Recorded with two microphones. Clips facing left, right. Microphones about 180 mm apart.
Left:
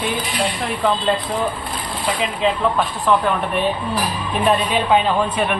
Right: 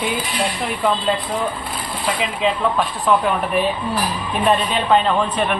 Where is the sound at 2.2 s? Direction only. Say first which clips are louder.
Left 1 dB; centre (ahead or behind).